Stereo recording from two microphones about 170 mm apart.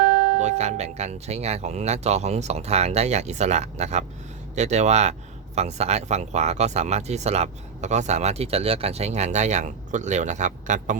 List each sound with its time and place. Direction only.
0.3 s speech: 40° right (ahead or behind)